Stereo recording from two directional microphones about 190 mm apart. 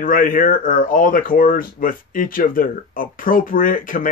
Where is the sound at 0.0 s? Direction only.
45° left (ahead or behind).